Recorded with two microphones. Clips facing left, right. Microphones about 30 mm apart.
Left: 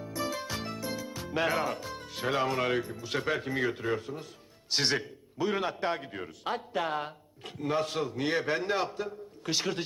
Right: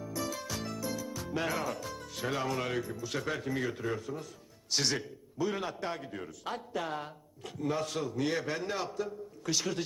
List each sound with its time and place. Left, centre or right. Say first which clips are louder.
0.0 s a man's voice: left 3 dB; left